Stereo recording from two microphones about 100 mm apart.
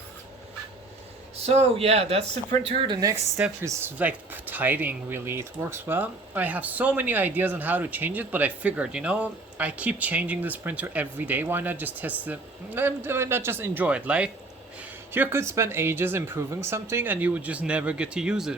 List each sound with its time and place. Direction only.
1.5 s speech: 90° right
2.8 s speech: 50° right (ahead or behind)
3.3 s speech: 20° right (ahead or behind)
15.1 s speech: 25° right (ahead or behind); by 18.5 s 5° right (ahead or behind)